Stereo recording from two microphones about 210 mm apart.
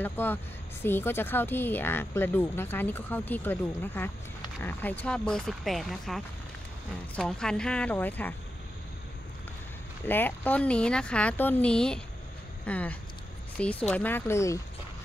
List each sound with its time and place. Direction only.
0.0 s speech: 10° left (ahead or behind)
10.0 s speech: 10° left (ahead or behind)